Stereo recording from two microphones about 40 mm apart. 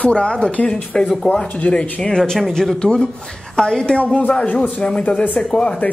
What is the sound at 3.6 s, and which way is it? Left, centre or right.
Speech, centre.